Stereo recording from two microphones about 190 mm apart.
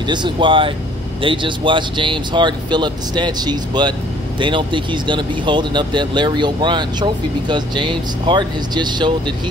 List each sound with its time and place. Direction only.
0.0 s speech: 25° right (ahead or behind)